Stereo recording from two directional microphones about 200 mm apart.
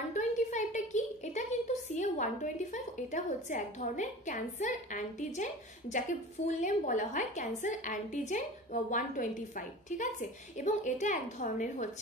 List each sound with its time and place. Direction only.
0.1 s a woman's voice: 40° left (ahead or behind)